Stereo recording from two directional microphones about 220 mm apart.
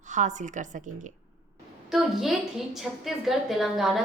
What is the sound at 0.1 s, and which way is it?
Speech, 35° right (ahead or behind).